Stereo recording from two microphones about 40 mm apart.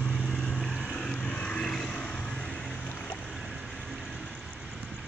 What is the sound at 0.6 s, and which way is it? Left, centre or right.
Vehicle, centre.